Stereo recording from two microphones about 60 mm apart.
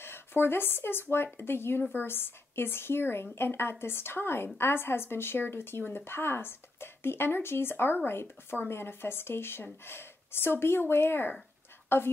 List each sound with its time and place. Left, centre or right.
0.0 s a woman's voice: left